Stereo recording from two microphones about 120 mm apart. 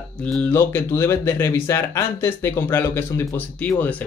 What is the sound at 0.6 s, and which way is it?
Speech, 20° left (ahead or behind).